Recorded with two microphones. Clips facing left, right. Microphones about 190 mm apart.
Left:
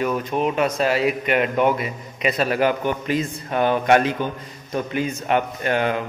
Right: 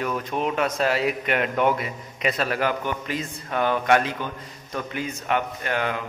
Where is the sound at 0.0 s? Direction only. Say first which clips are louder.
Left 4 dB; 10° left (ahead or behind).